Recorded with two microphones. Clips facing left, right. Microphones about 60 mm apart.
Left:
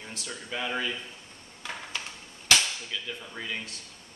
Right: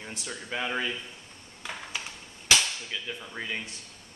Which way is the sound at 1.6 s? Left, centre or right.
Centre.